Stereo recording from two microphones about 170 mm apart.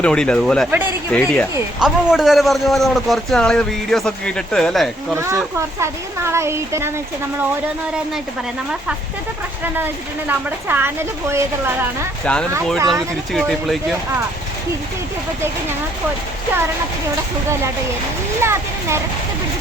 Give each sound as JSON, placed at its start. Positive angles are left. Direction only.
{"t": 0.0, "sound": "a man's voice", "side_deg": 5}
{"t": 1.8, "sound": "a man's voice", "side_deg": -5}
{"t": 5.1, "sound": "speech", "side_deg": -15}
{"t": 9.7, "sound": "speech", "side_deg": -10}
{"t": 12.2, "sound": "a man's voice", "side_deg": 5}
{"t": 18.4, "sound": "speech", "side_deg": -15}